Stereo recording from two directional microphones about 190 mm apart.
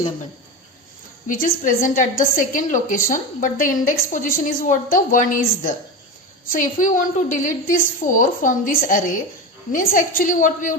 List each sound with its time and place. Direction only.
1.3 s a woman's voice: 45° left (ahead or behind)